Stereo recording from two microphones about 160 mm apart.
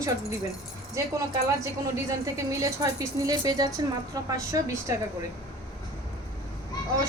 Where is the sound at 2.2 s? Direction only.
20° right (ahead or behind).